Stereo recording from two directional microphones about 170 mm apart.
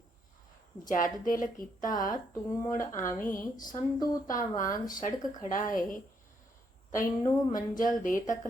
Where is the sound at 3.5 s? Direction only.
25° left (ahead or behind).